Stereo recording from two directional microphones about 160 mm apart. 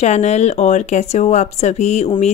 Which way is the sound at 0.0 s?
45° left (ahead or behind).